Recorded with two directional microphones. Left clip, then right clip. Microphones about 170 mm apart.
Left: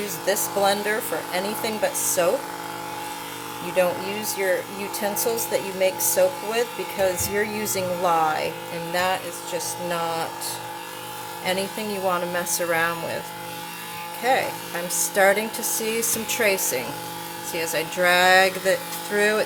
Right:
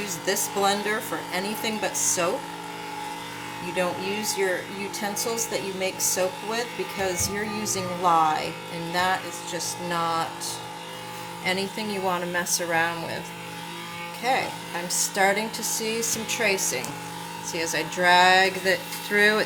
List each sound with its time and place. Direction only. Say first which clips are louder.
0.3 s speech: left 3 dB; 30° left (ahead or behind)
3.8 s speech: left 5 dB; 30° left (ahead or behind)
11.4 s speech: left 1 dB; 30° left (ahead or behind)
14.3 s speech: left 3 dB; 25° left (ahead or behind)